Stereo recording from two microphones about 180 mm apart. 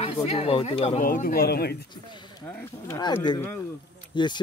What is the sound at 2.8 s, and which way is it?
Speech, 20° left (ahead or behind).